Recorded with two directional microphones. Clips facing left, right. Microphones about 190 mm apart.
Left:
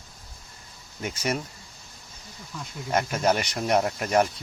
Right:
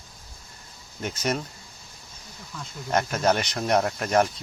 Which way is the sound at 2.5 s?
5° left (ahead or behind).